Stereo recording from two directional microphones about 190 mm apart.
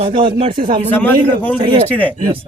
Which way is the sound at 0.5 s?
45° right (ahead or behind).